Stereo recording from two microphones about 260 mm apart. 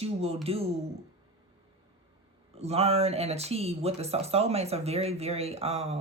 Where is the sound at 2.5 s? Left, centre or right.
Right.